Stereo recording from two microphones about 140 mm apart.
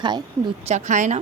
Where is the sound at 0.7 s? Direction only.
60° right (ahead or behind).